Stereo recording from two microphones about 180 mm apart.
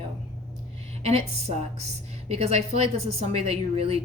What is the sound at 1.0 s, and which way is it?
A woman's voice, 35° right (ahead or behind).